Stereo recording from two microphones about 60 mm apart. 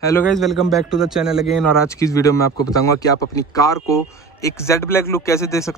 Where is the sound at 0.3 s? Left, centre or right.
Centre.